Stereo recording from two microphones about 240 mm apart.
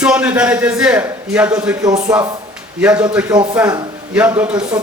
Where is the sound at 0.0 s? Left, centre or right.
Centre.